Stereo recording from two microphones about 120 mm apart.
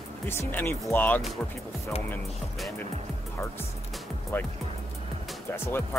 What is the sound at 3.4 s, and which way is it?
Speech, 20° left (ahead or behind).